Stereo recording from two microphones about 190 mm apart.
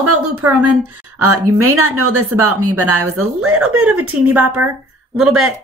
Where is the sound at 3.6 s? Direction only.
5° right (ahead or behind).